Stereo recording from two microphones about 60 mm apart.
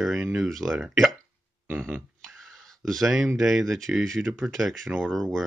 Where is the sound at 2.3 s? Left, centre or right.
Centre.